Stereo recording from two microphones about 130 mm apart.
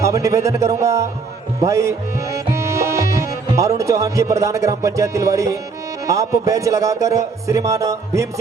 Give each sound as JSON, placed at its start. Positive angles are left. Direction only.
{"t": 0.0, "sound": "speech", "side_deg": -25}
{"t": 1.5, "sound": "music", "side_deg": -25}
{"t": 3.8, "sound": "speech", "side_deg": -25}